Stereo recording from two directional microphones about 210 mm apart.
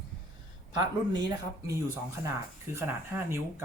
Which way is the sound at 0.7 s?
20° right (ahead or behind).